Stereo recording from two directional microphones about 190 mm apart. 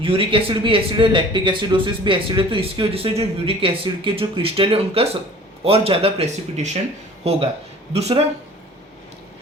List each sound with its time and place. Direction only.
0.0 s speech: 30° right (ahead or behind)
7.9 s speech: 35° right (ahead or behind)